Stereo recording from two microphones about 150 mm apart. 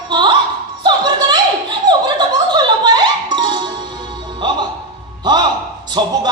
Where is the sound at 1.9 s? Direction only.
30° right (ahead or behind).